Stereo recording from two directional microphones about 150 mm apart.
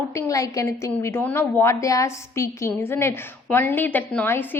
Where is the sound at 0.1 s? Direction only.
20° left (ahead or behind).